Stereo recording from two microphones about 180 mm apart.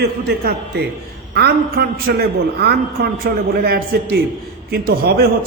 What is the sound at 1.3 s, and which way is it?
A man's voice, 60° right (ahead or behind).